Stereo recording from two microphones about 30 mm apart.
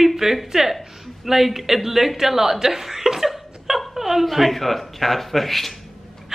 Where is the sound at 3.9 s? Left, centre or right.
Centre.